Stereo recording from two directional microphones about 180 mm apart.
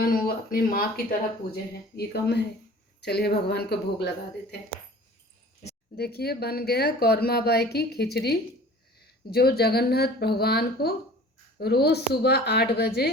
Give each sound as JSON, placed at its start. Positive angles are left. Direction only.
{"t": 0.0, "sound": "speech", "side_deg": 55}
{"t": 2.0, "sound": "speech", "side_deg": 65}
{"t": 6.0, "sound": "speech", "side_deg": 60}